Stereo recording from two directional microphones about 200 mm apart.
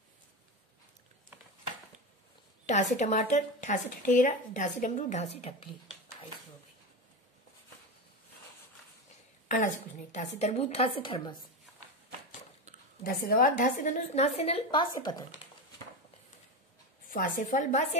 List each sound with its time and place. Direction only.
2.6 s a woman's voice: 35° left (ahead or behind)
10.1 s a woman's voice: 35° left (ahead or behind)
13.0 s a woman's voice: 45° left (ahead or behind); by 15.2 s 20° left (ahead or behind)
17.1 s a woman's voice: 45° left (ahead or behind)